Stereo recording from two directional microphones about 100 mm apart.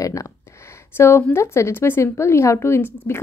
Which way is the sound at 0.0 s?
35° left (ahead or behind).